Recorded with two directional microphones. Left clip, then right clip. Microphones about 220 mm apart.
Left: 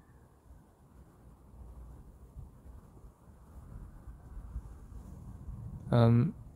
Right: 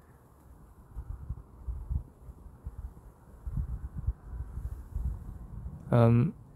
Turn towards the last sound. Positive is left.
turn(degrees=-5)  # may be behind; listen again after turning